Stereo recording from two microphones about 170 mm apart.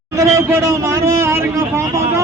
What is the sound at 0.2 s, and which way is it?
Speech, 15° right (ahead or behind).